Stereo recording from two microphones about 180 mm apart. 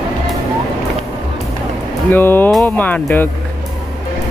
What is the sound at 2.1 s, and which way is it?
Speech, 10° left (ahead or behind).